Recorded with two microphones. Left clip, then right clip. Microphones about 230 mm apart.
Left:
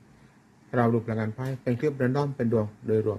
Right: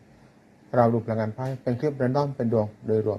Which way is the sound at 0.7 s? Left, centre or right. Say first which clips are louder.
Right 4 dB; centre.